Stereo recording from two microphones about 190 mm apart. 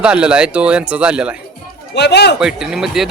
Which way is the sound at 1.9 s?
60° left (ahead or behind).